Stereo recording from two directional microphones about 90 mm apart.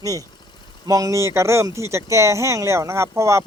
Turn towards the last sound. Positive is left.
turn(degrees=-30)  # may be behind; listen again after turning